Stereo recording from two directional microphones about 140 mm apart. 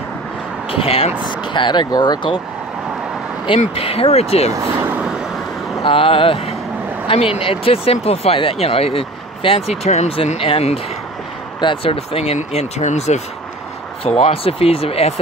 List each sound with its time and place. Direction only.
0.7 s speech: 45° left (ahead or behind)
3.4 s speech: 45° left (ahead or behind)
4.6 s speech: 15° right (ahead or behind)
5.9 s speech: 40° left (ahead or behind)